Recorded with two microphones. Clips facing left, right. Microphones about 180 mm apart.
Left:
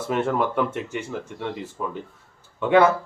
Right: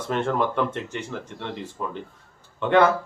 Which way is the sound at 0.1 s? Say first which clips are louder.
Left 1 dB; 5° left (ahead or behind).